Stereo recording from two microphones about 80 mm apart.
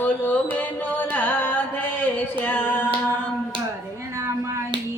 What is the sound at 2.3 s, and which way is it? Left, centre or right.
Female singing, left.